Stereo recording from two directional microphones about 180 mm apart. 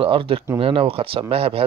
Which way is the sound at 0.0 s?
30° right (ahead or behind).